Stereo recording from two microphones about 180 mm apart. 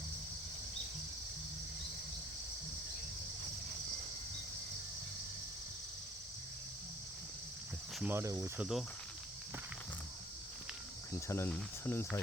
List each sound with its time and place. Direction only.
7.9 s speech: 10° right (ahead or behind)
8.5 s cricket: centre (ahead or behind)
11.1 s speech: 15° left (ahead or behind)